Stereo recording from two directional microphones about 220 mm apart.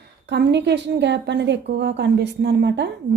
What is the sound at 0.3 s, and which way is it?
A woman's voice, 50° right (ahead or behind).